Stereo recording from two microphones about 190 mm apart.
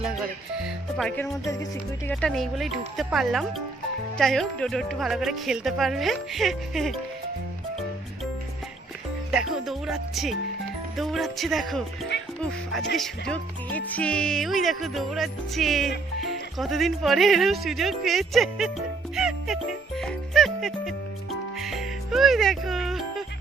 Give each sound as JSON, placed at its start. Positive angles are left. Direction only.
{"t": 0.5, "sound": "speech", "side_deg": 0}
{"t": 2.0, "sound": "speech", "side_deg": 5}
{"t": 9.3, "sound": "speech", "side_deg": -5}
{"t": 12.1, "sound": "music", "side_deg": 65}
{"t": 12.7, "sound": "speech", "side_deg": 0}
{"t": 19.1, "sound": "music", "side_deg": 0}